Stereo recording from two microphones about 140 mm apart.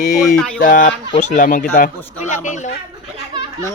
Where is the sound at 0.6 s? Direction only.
85° left.